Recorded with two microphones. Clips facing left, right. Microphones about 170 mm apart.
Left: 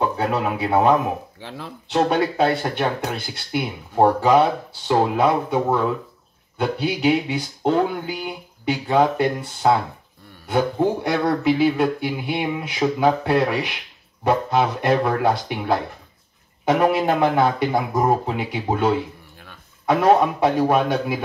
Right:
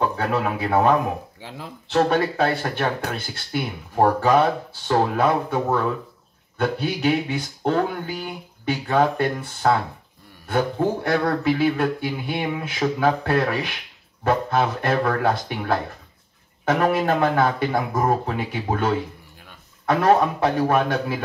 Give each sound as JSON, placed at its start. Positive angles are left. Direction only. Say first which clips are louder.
{"t": 0.0, "sound": "speech", "louder": "left 1 dB", "side_deg": 20}
{"t": 20.0, "sound": "speech", "louder": "left 2 dB", "side_deg": 20}